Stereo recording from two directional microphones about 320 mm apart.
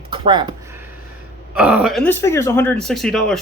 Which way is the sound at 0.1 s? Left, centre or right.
Centre.